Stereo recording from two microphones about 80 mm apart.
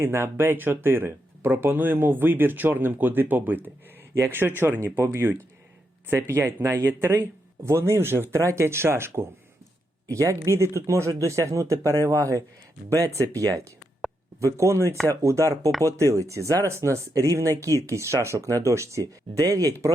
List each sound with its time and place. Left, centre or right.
0.0 s speech: right